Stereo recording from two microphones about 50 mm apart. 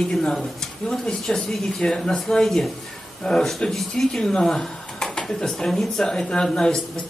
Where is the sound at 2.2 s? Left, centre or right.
Centre.